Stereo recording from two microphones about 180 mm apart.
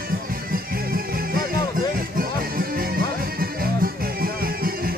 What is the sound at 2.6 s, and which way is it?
Music, 55° right (ahead or behind).